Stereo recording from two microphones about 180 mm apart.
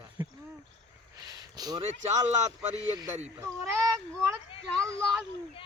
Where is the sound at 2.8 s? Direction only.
25° right (ahead or behind).